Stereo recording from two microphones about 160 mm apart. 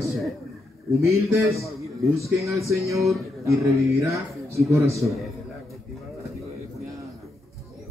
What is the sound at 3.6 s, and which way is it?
Speech, 20° right (ahead or behind).